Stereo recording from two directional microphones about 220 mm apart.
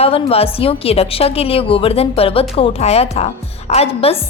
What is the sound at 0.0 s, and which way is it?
A woman's voice, 25° left (ahead or behind).